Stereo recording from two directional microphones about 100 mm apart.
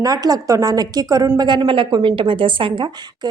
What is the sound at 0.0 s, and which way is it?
A woman's voice, 40° right (ahead or behind).